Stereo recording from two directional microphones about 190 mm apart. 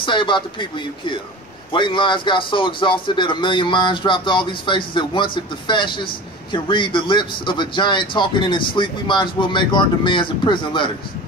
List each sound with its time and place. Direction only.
0.0 s a man's voice: 25° left (ahead or behind)